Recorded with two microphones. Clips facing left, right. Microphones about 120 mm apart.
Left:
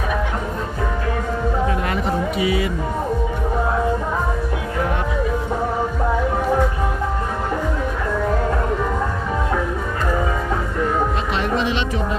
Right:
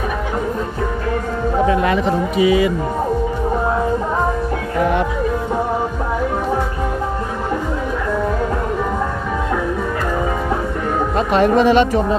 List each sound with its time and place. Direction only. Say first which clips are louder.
11.3 s speech: right 8 dB; 45° right (ahead or behind)